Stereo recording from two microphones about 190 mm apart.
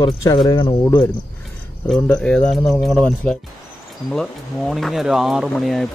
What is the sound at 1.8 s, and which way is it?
Speech, 5° left (ahead or behind).